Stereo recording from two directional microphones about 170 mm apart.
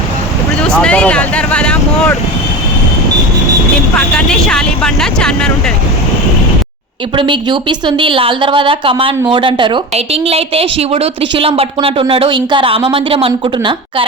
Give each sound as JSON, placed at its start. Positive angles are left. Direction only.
{"t": 0.7, "sound": "speech", "side_deg": 5}
{"t": 3.9, "sound": "speech", "side_deg": 5}
{"t": 7.2, "sound": "a woman's voice", "side_deg": -30}